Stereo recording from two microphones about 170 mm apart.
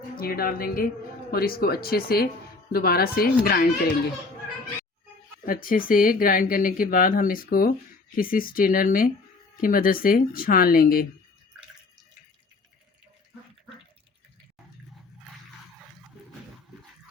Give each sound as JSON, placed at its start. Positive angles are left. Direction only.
{"t": 0.2, "sound": "speech", "side_deg": 60}
{"t": 5.5, "sound": "speech", "side_deg": 55}